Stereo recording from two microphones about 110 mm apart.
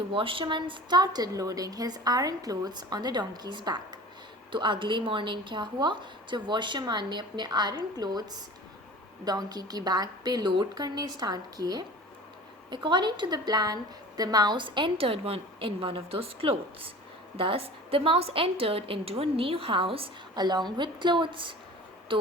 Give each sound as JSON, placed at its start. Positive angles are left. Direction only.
{"t": 0.1, "sound": "a woman's voice", "side_deg": -55}
{"t": 20.3, "sound": "a woman's voice", "side_deg": -40}